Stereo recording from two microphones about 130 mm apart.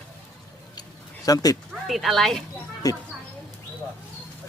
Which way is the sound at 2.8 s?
25° left (ahead or behind).